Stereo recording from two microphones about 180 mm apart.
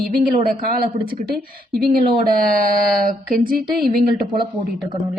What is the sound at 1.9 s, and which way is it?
Speech, 50° right (ahead or behind).